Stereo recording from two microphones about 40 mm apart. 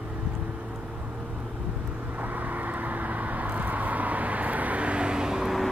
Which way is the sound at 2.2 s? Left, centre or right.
Right.